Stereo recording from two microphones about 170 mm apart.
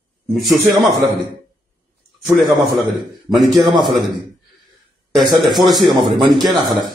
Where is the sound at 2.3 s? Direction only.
Centre (ahead or behind).